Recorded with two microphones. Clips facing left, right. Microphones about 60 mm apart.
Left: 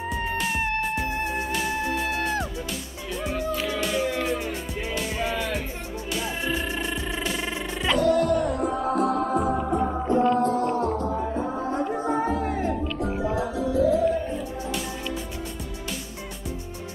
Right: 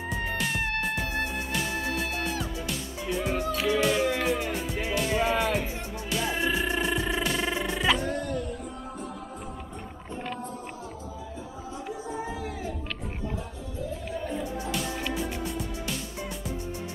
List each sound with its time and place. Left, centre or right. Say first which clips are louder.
0.1 s music: left 2 dB; centre
3.1 s music: even; centre
8.0 s music: left 10 dB; left
13.0 s music: left 10 dB; left
14.3 s music: left 1 dB; centre